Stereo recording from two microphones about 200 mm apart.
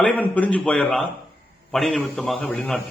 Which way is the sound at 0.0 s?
10° left (ahead or behind).